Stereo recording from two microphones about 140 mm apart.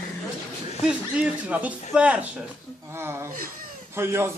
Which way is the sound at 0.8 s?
10° right (ahead or behind).